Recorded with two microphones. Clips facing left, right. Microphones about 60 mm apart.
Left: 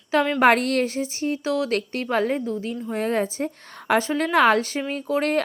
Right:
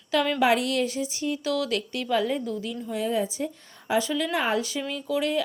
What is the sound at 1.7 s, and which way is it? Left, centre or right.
A woman's voice, left.